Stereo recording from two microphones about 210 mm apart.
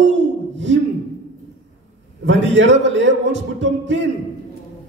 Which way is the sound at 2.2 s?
60° right (ahead or behind).